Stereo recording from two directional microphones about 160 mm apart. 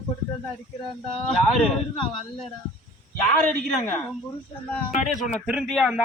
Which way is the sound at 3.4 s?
15° left (ahead or behind).